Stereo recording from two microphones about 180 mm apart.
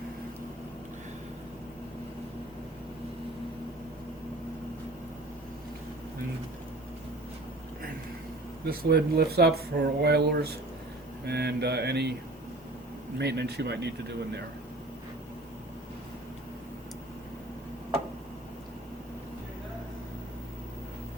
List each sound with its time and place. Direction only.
8.6 s speech: 60° right (ahead or behind)
13.1 s speech: 70° right (ahead or behind)